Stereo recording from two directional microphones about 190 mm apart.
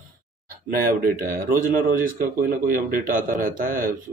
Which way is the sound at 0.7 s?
50° right (ahead or behind).